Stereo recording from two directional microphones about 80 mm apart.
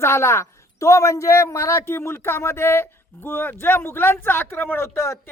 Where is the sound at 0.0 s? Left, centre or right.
Left.